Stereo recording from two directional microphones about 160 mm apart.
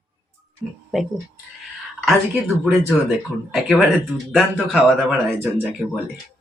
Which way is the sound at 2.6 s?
5° right (ahead or behind).